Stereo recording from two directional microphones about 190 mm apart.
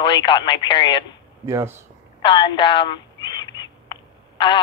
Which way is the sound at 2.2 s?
25° left (ahead or behind).